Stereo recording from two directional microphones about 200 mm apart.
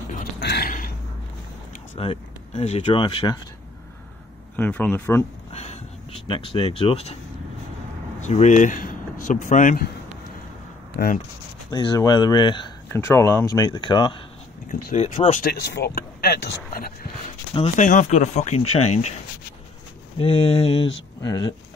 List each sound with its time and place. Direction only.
0.4 s a sound: 55° left (ahead or behind)
2.0 s speech: 30° left (ahead or behind)
4.6 s speech: 10° left (ahead or behind)
5.5 s a sound: 30° left (ahead or behind)
6.2 s speech: 25° left (ahead or behind)
8.2 s speech: 35° left (ahead or behind)
11.7 s speech: 20° left (ahead or behind)
14.7 s speech: 40° left (ahead or behind)
15.6 s speech: 55° left (ahead or behind)
17.6 s speech: 40° left (ahead or behind)
20.2 s speech: 30° left (ahead or behind)